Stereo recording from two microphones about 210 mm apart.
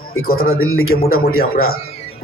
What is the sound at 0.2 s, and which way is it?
Speech, 45° left (ahead or behind).